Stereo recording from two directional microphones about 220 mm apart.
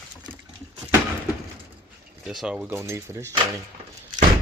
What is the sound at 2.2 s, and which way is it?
Speech, centre (ahead or behind).